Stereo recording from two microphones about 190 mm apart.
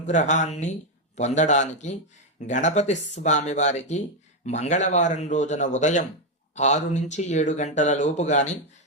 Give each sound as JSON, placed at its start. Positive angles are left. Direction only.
{"t": 0.0, "sound": "speech", "side_deg": 40}